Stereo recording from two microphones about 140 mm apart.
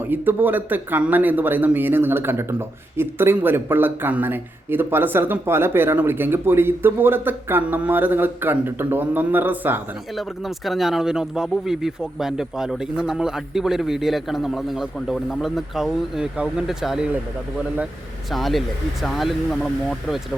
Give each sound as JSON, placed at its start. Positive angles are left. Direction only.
{"t": 0.0, "sound": "speech", "side_deg": -15}
{"t": 10.2, "sound": "speech", "side_deg": 0}
{"t": 18.3, "sound": "speech", "side_deg": 0}